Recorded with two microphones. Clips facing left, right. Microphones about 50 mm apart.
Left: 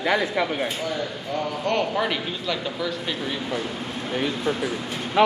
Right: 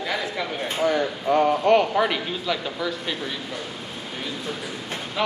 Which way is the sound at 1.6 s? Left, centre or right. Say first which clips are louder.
Right 5 dB; centre.